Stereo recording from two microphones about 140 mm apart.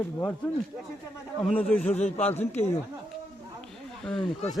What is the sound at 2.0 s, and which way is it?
Speech, 50° left (ahead or behind).